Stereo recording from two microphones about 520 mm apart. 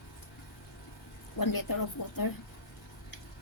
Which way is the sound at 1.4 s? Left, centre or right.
Left.